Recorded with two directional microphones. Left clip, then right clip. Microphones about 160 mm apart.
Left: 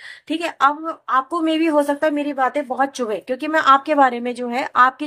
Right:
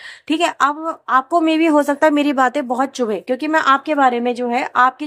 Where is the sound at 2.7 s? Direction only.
45° right (ahead or behind).